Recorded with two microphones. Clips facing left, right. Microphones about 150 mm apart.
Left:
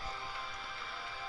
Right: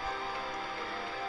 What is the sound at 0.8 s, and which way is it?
Music, 75° right (ahead or behind).